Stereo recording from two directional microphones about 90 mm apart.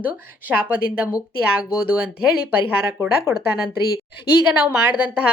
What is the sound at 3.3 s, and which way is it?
Speech, 35° right (ahead or behind).